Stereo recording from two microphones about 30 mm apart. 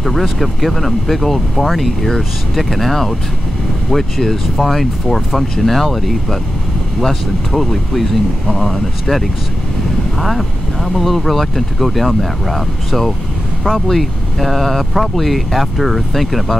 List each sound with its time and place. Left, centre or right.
0.0 s speech: centre
11.0 s speech: centre